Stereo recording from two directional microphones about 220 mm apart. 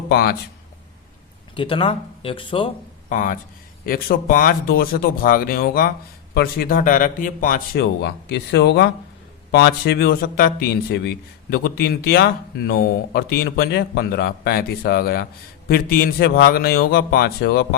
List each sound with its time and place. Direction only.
0.1 s a man's voice: 45° left (ahead or behind)
1.5 s speech: 25° left (ahead or behind)
3.1 s a man's voice: 35° left (ahead or behind)